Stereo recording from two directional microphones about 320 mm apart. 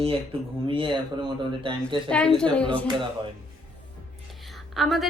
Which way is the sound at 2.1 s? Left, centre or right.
Centre.